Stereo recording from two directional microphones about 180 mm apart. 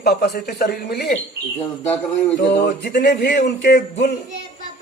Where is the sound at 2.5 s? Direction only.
65° left (ahead or behind); by 3.4 s 50° left (ahead or behind).